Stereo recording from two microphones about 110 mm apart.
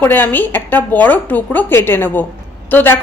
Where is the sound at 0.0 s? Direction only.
15° left (ahead or behind).